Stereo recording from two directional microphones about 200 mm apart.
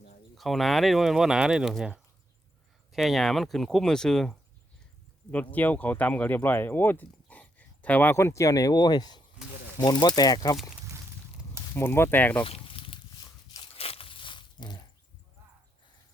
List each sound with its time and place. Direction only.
0.3 s speech: centre (ahead or behind); by 10.6 s 20° left (ahead or behind)
11.7 s speech: 10° left (ahead or behind)
12.4 s a sound: 25° left (ahead or behind)